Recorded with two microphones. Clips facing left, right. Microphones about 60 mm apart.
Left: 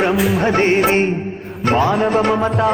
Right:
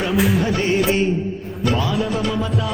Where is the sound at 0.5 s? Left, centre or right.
Left.